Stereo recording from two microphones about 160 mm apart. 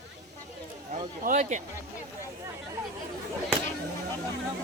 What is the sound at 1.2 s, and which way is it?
Speech, 60° right (ahead or behind).